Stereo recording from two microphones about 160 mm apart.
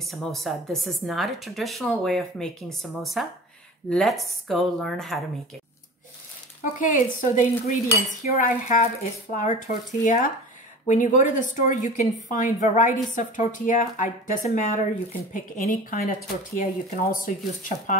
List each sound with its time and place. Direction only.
0.0 s speech: centre (ahead or behind)
6.8 s a woman's voice: 55° left (ahead or behind)